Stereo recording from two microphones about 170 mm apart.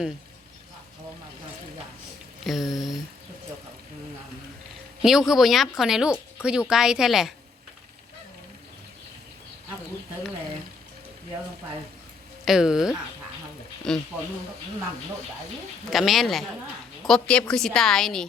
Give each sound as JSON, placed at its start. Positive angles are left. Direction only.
{"t": 2.4, "sound": "speech", "side_deg": 0}
{"t": 5.0, "sound": "speech", "side_deg": 0}
{"t": 12.5, "sound": "speech", "side_deg": -5}
{"t": 15.9, "sound": "speech", "side_deg": 0}